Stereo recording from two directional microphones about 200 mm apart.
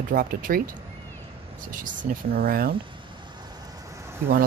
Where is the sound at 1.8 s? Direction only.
45° right (ahead or behind).